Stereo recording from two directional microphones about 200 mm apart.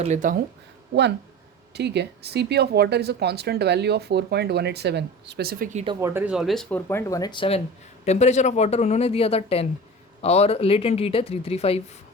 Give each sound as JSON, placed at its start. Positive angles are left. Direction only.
{"t": 0.0, "sound": "speech", "side_deg": -40}
{"t": 1.7, "sound": "speech", "side_deg": -55}
{"t": 5.7, "sound": "speech", "side_deg": -25}
{"t": 6.0, "sound": "speech", "side_deg": -10}